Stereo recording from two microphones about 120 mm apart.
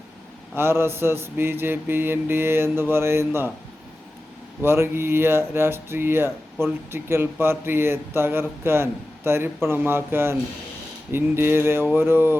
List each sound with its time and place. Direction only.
0.5 s speech: 20° right (ahead or behind)
4.6 s speech: 20° right (ahead or behind)